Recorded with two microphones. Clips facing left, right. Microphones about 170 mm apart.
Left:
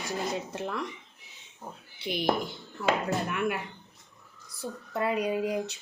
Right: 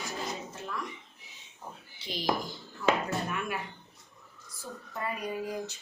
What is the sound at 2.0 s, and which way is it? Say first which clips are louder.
Speech: left 4 dB; 60° left (ahead or behind).